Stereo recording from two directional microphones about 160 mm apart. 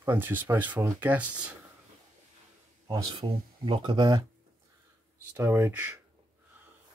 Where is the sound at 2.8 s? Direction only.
25° right (ahead or behind).